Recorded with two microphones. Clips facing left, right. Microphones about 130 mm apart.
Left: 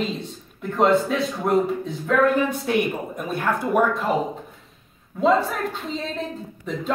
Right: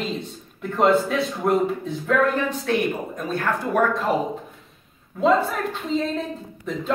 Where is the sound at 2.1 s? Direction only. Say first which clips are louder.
Left 2 dB; 10° left (ahead or behind).